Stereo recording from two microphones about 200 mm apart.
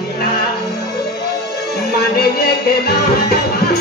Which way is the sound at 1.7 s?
50° left (ahead or behind).